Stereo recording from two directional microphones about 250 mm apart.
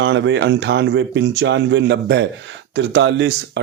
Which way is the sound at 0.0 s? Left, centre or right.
Right.